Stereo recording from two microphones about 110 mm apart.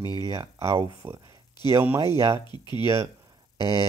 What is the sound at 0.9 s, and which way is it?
Speech, 30° right (ahead or behind).